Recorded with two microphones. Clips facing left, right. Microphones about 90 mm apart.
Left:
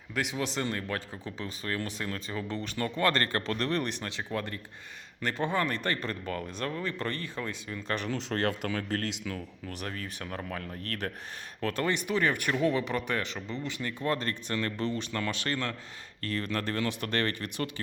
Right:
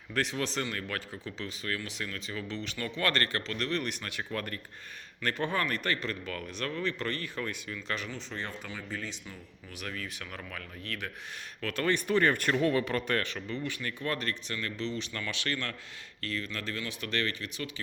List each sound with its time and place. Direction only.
0.1 s speech: 15° left (ahead or behind)
0.7 s speech: 30° left (ahead or behind)
7.8 s speech: 40° left (ahead or behind)
8.0 s speech: 70° left (ahead or behind)
9.8 s speech: 35° left (ahead or behind)
11.6 s speech: 25° left (ahead or behind)
13.2 s speech: 25° left (ahead or behind)
14.4 s speech: 40° left (ahead or behind)